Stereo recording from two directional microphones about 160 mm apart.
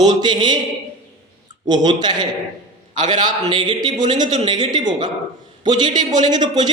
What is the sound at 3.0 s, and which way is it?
Speech, 50° right (ahead or behind).